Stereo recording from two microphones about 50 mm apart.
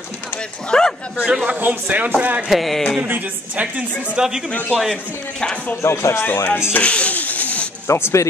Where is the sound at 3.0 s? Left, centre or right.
Right.